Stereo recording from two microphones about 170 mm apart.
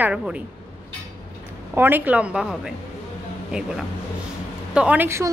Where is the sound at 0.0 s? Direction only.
5° right (ahead or behind).